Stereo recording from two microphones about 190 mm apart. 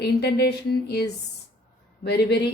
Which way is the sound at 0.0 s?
60° left (ahead or behind).